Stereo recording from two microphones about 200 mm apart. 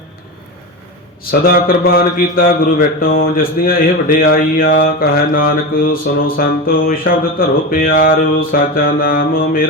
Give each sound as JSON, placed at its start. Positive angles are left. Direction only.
{"t": 1.2, "sound": "a man's voice", "side_deg": 50}